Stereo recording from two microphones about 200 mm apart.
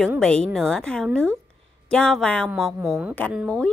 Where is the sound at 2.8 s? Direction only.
10° right (ahead or behind).